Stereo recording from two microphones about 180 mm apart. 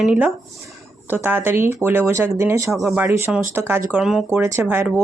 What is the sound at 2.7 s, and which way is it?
Speech, 5° right (ahead or behind).